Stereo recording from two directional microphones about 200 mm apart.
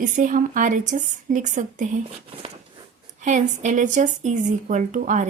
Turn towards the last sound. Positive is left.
turn(degrees=-35)  # may be behind; listen again after turning